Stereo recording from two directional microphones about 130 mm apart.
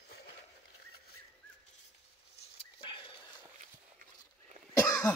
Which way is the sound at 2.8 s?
40° left (ahead or behind).